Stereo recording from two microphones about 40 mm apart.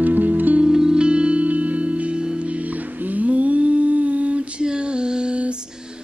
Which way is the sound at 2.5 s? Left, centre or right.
Right.